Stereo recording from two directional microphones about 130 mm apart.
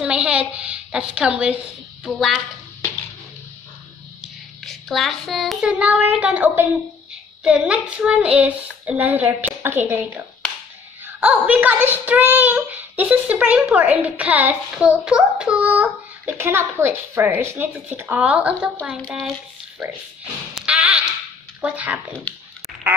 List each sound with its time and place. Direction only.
0.0 s a sound: 10° right (ahead or behind)
2.0 s a woman's voice: centre (ahead or behind)
4.2 s a child's voice: centre (ahead or behind); by 10.1 s 15° right (ahead or behind)
11.1 s a child's voice: 10° right (ahead or behind)
20.5 s a sound: 10° right (ahead or behind)
21.5 s speech: 10° right (ahead or behind)